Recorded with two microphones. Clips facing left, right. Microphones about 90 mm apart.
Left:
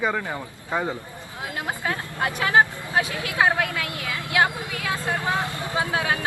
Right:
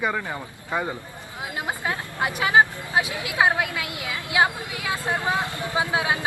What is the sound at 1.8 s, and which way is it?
Speech, 15° right (ahead or behind).